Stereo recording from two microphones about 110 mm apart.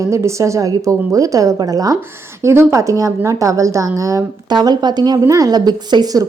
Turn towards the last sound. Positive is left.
turn(degrees=-40)  # may be behind; listen again after turning